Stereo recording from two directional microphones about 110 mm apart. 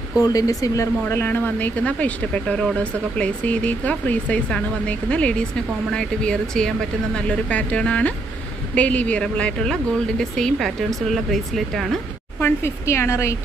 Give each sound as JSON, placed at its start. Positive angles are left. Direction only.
{"t": 0.2, "sound": "speech", "side_deg": 35}
{"t": 1.0, "sound": "speech", "side_deg": 20}
{"t": 12.4, "sound": "speech", "side_deg": 20}